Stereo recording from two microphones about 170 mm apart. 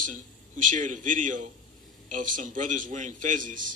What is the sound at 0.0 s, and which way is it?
A man's voice, 50° right (ahead or behind).